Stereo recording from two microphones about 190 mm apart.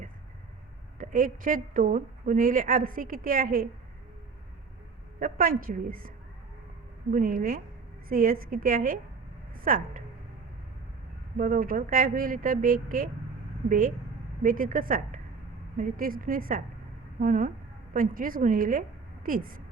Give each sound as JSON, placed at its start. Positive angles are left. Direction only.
{"t": 0.9, "sound": "a woman's voice", "side_deg": -45}
{"t": 5.2, "sound": "a woman's voice", "side_deg": -45}
{"t": 7.1, "sound": "a woman's voice", "side_deg": -45}
{"t": 11.3, "sound": "a woman's voice", "side_deg": -50}